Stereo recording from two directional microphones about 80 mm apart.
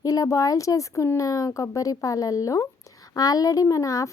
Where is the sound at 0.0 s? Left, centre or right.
Left.